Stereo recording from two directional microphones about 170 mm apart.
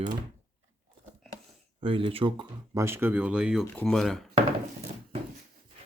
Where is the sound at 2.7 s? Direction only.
15° right (ahead or behind); by 4.3 s centre (ahead or behind).